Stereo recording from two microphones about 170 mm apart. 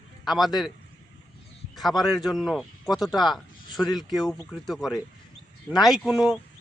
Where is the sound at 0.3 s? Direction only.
Centre (ahead or behind).